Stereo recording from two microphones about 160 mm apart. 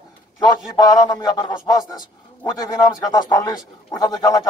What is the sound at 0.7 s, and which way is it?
A man's voice, 25° left (ahead or behind).